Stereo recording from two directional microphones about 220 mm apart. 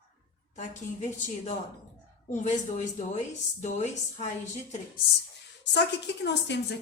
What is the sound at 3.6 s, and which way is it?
Speech, 30° left (ahead or behind).